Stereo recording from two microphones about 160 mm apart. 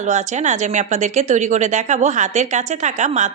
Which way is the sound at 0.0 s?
50° right (ahead or behind).